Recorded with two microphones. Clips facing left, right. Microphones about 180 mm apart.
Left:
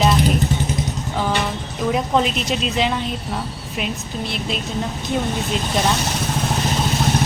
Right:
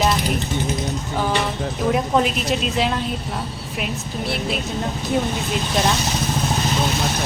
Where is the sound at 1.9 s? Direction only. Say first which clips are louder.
Even; 5° right (ahead or behind).